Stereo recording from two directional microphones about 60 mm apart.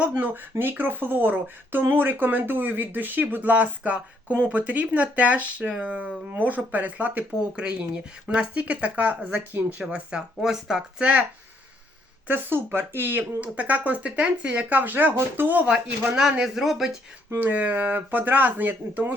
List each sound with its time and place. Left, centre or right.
0.0 s speech: right
9.9 s speech: centre
12.3 s speech: right
13.4 s speech: right
15.6 s speech: centre
17.3 s speech: right